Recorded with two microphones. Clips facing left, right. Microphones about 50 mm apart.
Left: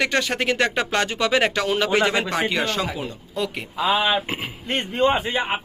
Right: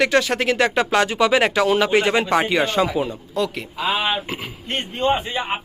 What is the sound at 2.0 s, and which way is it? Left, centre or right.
Speech, centre.